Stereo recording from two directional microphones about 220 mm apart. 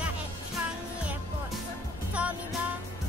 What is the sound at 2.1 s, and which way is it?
Music, 5° right (ahead or behind).